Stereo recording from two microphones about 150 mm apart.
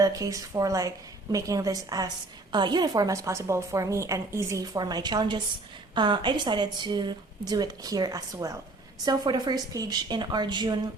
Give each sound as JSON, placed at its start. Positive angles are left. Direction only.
{"t": 0.0, "sound": "a woman's voice", "side_deg": -25}